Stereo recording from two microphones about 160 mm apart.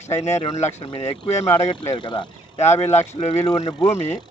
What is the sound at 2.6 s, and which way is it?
Speech, 45° left (ahead or behind).